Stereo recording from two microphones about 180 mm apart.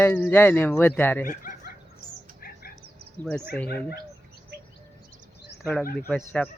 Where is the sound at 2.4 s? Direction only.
55° left (ahead or behind).